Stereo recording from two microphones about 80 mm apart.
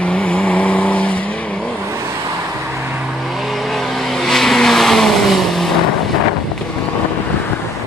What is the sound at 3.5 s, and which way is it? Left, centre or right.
Vehicle, centre.